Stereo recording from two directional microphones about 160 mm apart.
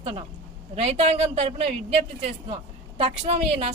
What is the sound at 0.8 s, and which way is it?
Speech, 40° right (ahead or behind).